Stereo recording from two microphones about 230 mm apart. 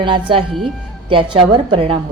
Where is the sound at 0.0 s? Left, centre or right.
Right.